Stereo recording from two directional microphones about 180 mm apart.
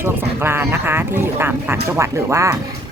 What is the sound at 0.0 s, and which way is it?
Speech, 10° right (ahead or behind).